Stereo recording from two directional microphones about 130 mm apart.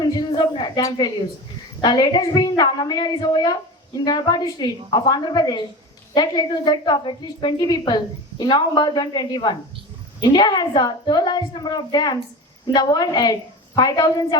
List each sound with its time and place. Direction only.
0.0 s a woman's voice: 30° left (ahead or behind)